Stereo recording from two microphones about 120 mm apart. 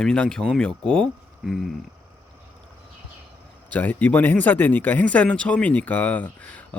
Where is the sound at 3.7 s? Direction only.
15° left (ahead or behind).